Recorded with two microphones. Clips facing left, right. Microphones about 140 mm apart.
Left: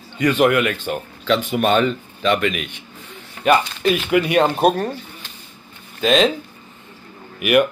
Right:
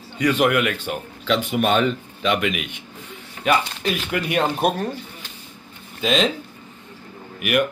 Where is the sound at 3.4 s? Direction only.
5° left (ahead or behind).